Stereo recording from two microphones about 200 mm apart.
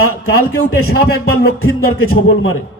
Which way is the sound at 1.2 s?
75° left (ahead or behind).